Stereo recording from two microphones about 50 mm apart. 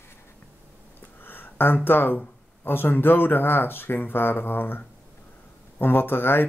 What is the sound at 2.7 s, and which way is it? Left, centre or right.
A man's voice, left.